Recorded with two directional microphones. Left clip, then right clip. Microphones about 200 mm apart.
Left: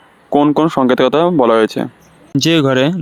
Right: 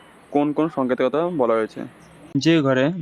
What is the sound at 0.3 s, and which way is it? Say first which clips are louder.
Speech: left 9 dB; 45° left (ahead or behind).